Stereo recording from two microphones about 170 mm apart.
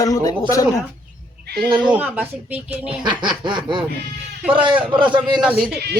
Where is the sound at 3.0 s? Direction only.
25° right (ahead or behind).